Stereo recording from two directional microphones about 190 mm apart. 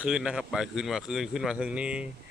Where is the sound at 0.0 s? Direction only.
5° right (ahead or behind).